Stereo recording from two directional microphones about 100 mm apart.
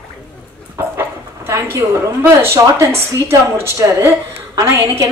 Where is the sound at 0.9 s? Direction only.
25° right (ahead or behind).